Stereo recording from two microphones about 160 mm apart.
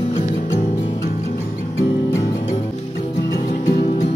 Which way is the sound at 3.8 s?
40° left (ahead or behind).